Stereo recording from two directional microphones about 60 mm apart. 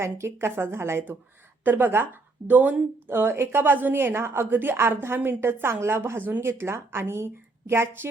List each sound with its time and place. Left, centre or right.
0.0 s a woman's voice: right